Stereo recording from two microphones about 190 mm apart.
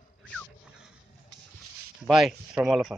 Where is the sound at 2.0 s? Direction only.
Centre (ahead or behind).